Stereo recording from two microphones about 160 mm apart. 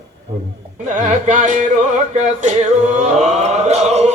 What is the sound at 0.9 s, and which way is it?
Music, 50° right (ahead or behind).